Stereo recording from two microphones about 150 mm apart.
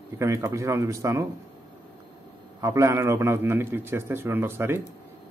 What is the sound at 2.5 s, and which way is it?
Speech, 20° right (ahead or behind).